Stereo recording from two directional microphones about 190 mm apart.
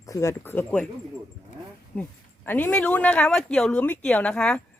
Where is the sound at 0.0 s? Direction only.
15° left (ahead or behind).